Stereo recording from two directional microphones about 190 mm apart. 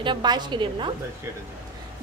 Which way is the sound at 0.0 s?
25° right (ahead or behind).